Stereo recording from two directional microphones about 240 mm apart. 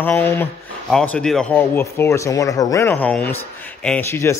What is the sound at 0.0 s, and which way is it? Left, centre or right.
Speech, centre.